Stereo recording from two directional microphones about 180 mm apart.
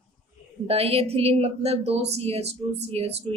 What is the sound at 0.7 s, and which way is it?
A woman's voice, 35° right (ahead or behind).